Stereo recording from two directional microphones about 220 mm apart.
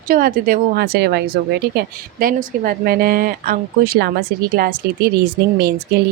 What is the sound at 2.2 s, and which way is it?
Speech, 40° right (ahead or behind).